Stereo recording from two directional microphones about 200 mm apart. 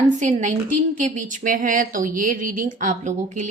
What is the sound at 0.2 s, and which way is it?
A woman's voice, 35° right (ahead or behind).